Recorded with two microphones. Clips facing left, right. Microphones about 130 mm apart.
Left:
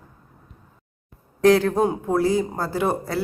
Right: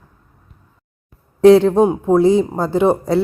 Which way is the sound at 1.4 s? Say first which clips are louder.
Right 8 dB; 25° right (ahead or behind).